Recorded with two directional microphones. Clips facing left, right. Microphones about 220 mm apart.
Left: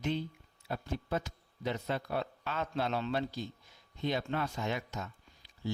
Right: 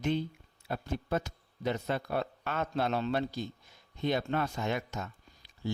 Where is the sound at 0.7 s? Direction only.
50° right (ahead or behind).